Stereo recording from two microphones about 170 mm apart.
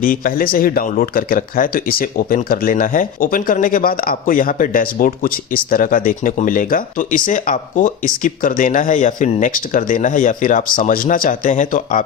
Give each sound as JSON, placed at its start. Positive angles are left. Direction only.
{"t": 0.0, "sound": "speech", "side_deg": 55}